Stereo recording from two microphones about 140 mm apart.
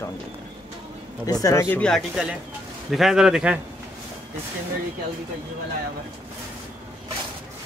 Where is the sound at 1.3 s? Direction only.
25° left (ahead or behind); by 3.6 s 5° right (ahead or behind).